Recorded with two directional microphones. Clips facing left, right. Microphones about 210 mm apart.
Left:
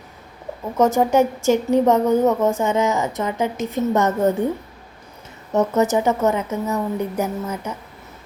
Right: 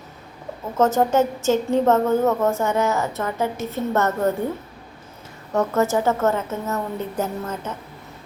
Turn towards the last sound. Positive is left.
turn(degrees=10)  # may be behind; listen again after turning